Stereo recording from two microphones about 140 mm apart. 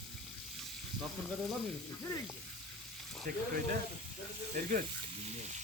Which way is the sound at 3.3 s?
90° right.